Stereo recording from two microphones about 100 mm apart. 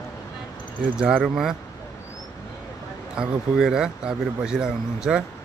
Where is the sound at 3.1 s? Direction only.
5° right (ahead or behind).